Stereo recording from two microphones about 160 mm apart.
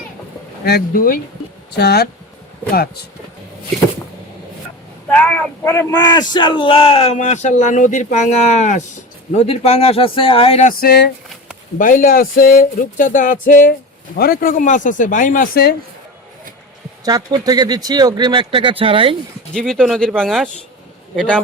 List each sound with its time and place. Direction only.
0.6 s a sound: 75° left (ahead or behind)
1.7 s speech: 85° left
2.7 s speech: 75° left (ahead or behind)
5.1 s speech: 10° left (ahead or behind); by 10.7 s 35° left (ahead or behind)
10.7 s speech: 75° left (ahead or behind)
11.8 s a sound: 55° left (ahead or behind)
17.1 s speech: 25° right (ahead or behind)
19.5 s speech: 5° left (ahead or behind)